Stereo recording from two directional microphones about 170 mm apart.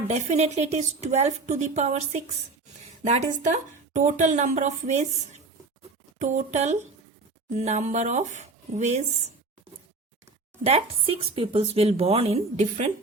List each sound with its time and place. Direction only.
0.1 s a woman's voice: 40° right (ahead or behind)
10.6 s speech: 35° right (ahead or behind)